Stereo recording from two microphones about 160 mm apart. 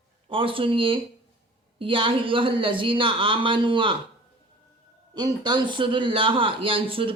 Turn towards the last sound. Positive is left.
turn(degrees=-35)  # may be behind; listen again after turning